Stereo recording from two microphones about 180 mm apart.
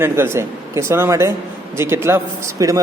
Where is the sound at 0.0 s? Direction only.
15° right (ahead or behind).